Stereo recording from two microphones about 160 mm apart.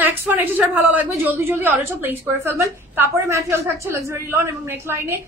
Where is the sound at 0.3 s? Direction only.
10° right (ahead or behind).